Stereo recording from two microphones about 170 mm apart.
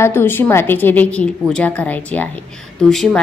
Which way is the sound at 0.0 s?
15° left (ahead or behind).